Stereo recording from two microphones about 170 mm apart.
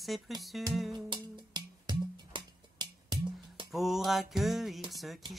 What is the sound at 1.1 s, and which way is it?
Music, 25° right (ahead or behind).